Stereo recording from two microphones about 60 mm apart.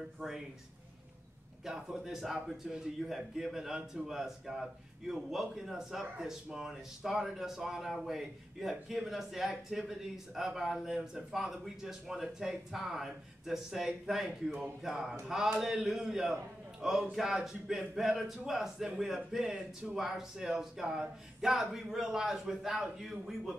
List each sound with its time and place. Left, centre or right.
1.7 s a man's voice: centre